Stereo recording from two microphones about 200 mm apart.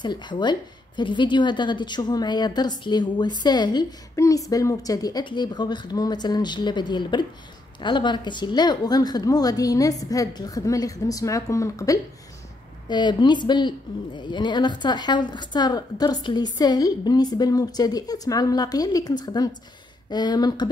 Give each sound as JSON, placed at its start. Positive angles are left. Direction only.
{"t": 0.0, "sound": "a woman's voice", "side_deg": 20}